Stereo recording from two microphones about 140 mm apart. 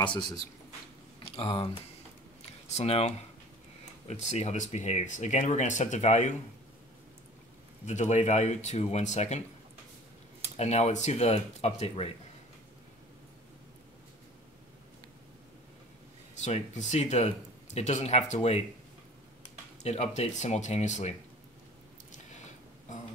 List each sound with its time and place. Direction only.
0.0 s speech: 35° left (ahead or behind); by 6.3 s 55° left (ahead or behind)
7.8 s speech: 55° left (ahead or behind)
10.6 s speech: 55° left (ahead or behind)
16.3 s speech: 55° left (ahead or behind)
19.8 s speech: 50° left (ahead or behind)
22.1 s a sound: 60° left (ahead or behind)